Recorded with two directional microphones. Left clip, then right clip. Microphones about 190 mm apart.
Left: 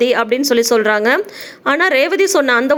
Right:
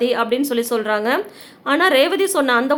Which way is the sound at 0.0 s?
30° left (ahead or behind).